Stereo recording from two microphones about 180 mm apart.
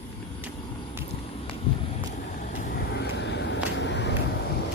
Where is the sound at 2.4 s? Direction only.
55° left (ahead or behind); by 3.6 s 70° left (ahead or behind).